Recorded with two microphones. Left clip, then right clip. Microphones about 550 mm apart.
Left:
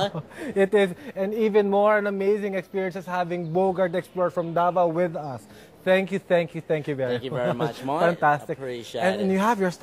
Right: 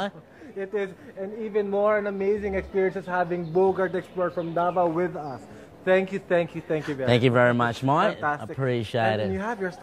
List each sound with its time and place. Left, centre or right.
0.6 s speech: left
5.9 s speech: left
7.1 s speech: right
8.2 s speech: left
8.5 s speech: right
9.3 s speech: left